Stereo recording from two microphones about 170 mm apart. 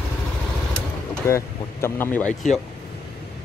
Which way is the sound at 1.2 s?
15° left (ahead or behind).